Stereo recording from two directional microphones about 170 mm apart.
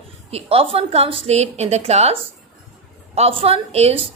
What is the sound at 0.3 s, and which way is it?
A woman's voice, 35° right (ahead or behind).